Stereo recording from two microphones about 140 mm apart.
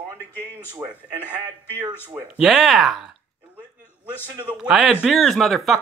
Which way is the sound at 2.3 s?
5° right (ahead or behind).